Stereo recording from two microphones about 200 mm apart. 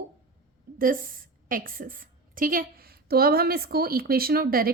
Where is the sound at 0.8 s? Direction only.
45° right (ahead or behind).